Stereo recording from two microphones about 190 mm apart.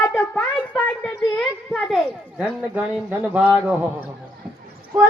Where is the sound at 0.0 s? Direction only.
10° left (ahead or behind).